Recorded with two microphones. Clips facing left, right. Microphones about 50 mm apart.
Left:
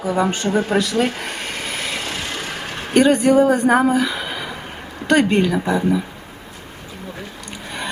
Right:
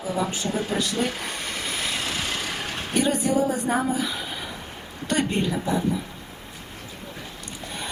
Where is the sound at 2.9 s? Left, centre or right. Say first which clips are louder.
Left 9 dB; left.